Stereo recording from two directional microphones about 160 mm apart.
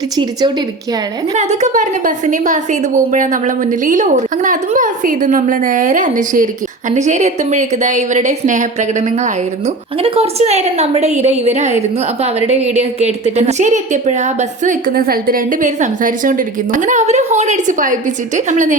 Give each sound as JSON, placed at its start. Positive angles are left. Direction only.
{"t": 1.4, "sound": "a woman's voice", "side_deg": -50}